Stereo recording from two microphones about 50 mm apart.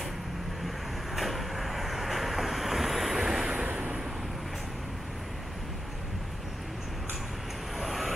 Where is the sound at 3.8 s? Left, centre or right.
Centre.